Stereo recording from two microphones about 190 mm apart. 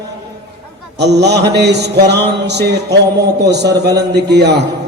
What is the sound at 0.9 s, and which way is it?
Mantra, 60° right (ahead or behind).